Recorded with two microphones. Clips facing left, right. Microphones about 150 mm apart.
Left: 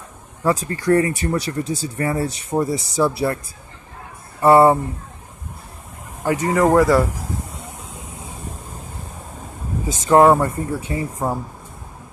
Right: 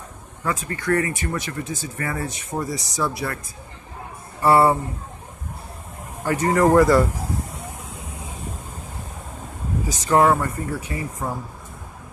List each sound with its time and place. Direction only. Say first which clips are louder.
0.4 s speech: left 6 dB; 35° left (ahead or behind)
4.4 s speech: left 4 dB; 20° left (ahead or behind)
6.2 s speech: left 2 dB; 15° left (ahead or behind)
6.5 s speech: even; 5° left (ahead or behind)
9.8 s speech: left 5 dB; 25° left (ahead or behind)